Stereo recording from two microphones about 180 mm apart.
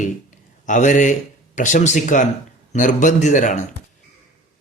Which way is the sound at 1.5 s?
45° left (ahead or behind).